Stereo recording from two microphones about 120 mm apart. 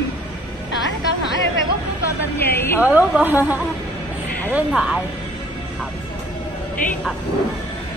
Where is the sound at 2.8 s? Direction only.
15° right (ahead or behind).